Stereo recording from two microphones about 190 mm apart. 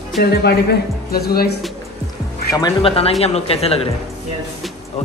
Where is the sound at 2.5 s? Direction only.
25° left (ahead or behind).